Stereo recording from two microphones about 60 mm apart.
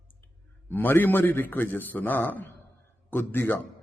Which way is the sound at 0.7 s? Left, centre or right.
Left.